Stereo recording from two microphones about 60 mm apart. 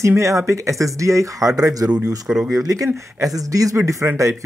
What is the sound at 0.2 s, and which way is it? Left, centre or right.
Speech, right.